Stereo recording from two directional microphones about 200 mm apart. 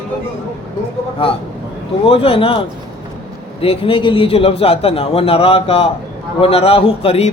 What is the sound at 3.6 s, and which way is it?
A man's voice, 25° left (ahead or behind).